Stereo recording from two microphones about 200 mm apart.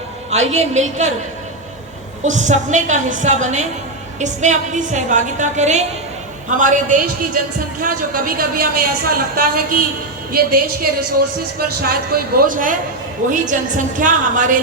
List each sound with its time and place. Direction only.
0.3 s a woman's voice: 35° right (ahead or behind)
2.2 s a woman's voice: 35° right (ahead or behind)